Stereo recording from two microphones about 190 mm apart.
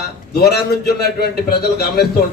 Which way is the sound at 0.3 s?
60° left (ahead or behind).